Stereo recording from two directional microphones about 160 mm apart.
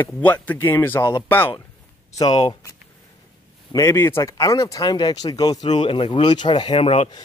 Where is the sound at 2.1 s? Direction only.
25° left (ahead or behind).